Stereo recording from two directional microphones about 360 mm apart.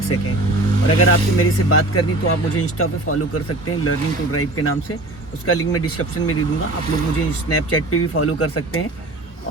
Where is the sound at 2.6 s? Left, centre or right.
Left.